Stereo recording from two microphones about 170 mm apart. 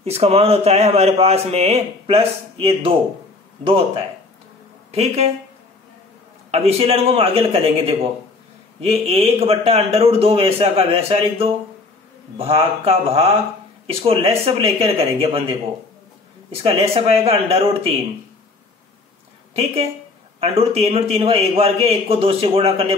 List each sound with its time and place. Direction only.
0.0 s a man's voice: 35° right (ahead or behind)
6.5 s a man's voice: 35° right (ahead or behind)
16.6 s a man's voice: 35° right (ahead or behind)
19.5 s a man's voice: 35° right (ahead or behind)